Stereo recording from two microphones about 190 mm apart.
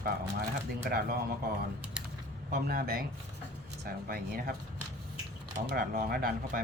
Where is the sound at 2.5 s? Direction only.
55° right (ahead or behind).